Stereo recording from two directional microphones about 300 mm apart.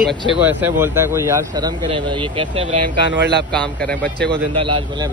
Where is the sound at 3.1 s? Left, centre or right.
Right.